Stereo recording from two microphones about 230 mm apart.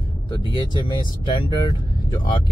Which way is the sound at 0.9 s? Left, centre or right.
Left.